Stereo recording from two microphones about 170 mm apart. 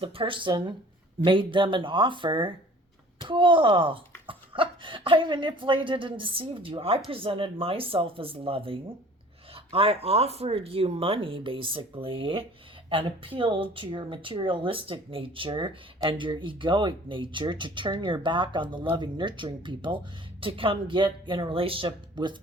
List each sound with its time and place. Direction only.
0.0 s speech: 30° right (ahead or behind)